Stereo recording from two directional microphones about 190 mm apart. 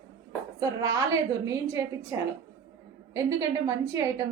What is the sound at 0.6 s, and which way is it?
A woman's voice, 20° right (ahead or behind).